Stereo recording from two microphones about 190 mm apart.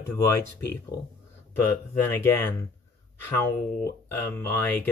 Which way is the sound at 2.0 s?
15° left (ahead or behind).